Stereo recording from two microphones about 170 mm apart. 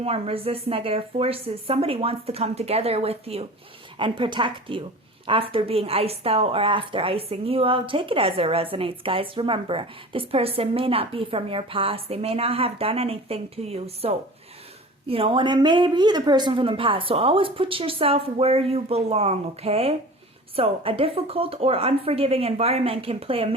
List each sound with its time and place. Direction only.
0.0 s a woman's voice: 35° right (ahead or behind)